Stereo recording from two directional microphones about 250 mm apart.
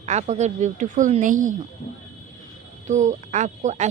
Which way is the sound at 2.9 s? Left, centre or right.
Right.